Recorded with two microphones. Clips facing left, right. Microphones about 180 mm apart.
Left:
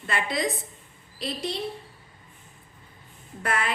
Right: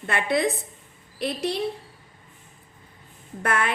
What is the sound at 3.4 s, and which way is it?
Speech, 60° right (ahead or behind).